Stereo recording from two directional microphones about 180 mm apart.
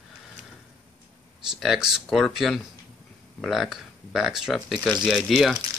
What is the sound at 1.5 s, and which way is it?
Speech, centre (ahead or behind).